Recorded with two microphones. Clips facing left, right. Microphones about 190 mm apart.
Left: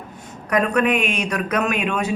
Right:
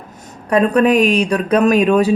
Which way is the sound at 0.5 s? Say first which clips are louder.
Right 6 dB; 30° right (ahead or behind).